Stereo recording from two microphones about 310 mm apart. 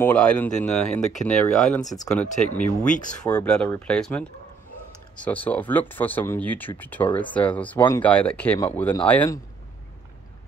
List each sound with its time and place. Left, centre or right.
0.0 s speech: centre